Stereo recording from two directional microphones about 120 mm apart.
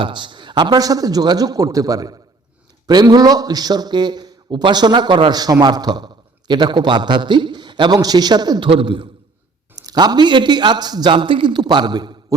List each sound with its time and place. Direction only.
0.0 s a man's voice: 40° right (ahead or behind)
9.7 s a man's voice: 35° right (ahead or behind)